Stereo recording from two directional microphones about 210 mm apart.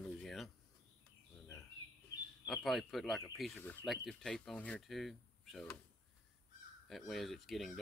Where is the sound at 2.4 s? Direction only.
Centre (ahead or behind).